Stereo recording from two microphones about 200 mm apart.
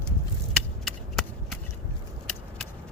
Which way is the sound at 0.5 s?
Centre (ahead or behind).